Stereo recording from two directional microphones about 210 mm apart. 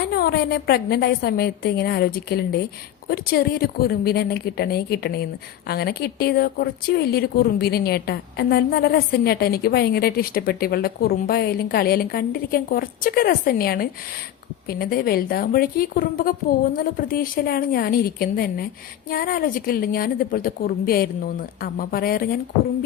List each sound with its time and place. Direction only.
0.1 s a woman's voice: 45° left (ahead or behind)